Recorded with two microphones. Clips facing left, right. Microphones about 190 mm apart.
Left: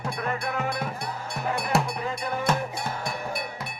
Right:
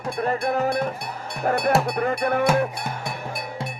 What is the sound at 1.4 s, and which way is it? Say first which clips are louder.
Music: right 6 dB; 60° right (ahead or behind).